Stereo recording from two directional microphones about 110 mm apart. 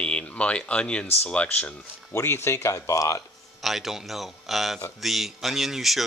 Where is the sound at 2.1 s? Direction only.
25° left (ahead or behind).